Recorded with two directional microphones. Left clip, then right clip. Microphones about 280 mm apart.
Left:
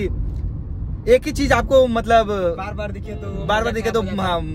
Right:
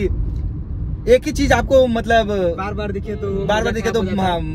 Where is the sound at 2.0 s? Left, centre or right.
Centre.